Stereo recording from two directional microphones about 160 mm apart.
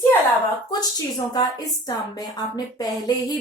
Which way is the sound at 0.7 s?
25° left (ahead or behind).